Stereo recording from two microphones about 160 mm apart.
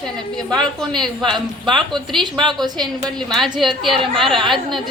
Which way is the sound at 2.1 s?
30° right (ahead or behind).